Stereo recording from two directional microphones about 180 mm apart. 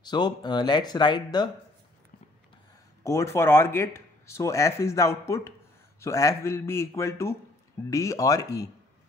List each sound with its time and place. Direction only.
0.0 s speech: 25° left (ahead or behind)
3.0 s speech: 15° left (ahead or behind)